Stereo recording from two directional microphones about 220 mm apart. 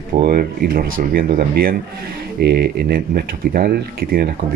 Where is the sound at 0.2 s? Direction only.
45° right (ahead or behind).